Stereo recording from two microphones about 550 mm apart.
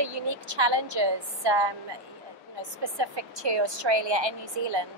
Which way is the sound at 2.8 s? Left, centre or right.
Right.